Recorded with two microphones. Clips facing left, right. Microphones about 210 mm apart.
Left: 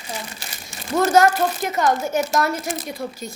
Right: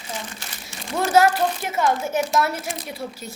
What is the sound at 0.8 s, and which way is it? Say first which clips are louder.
A woman's voice: left 2 dB; centre (ahead or behind).